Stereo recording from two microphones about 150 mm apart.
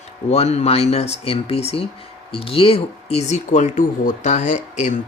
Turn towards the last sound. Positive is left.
turn(degrees=55)  # may be behind; listen again after turning